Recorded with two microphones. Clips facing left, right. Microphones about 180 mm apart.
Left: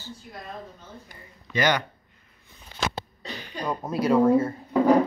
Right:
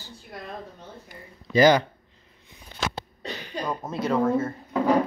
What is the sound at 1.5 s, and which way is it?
Speech, 30° right (ahead or behind).